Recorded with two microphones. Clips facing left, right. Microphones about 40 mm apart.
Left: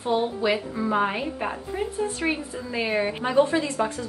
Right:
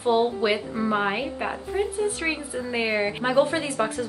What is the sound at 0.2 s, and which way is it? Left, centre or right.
A woman's voice, centre.